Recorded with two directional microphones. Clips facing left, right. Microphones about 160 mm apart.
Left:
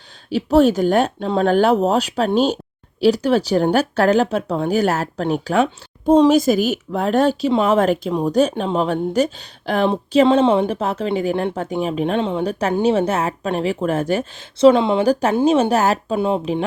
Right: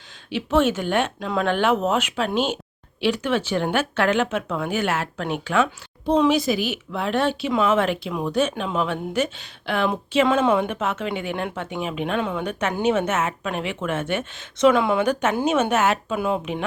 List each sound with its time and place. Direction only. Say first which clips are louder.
0.3 s a woman's voice: left 6 dB; 40° left (ahead or behind)